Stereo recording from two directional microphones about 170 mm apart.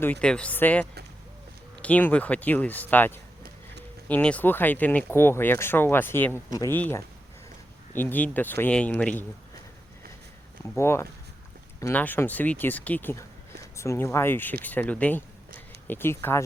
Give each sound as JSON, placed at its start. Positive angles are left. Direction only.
{"t": 0.0, "sound": "speech", "side_deg": 5}
{"t": 10.8, "sound": "speech", "side_deg": 15}